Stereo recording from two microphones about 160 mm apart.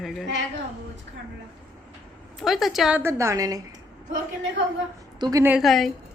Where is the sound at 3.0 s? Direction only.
20° right (ahead or behind).